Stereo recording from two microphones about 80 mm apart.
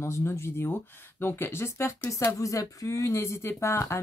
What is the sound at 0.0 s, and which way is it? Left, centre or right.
Speech, left.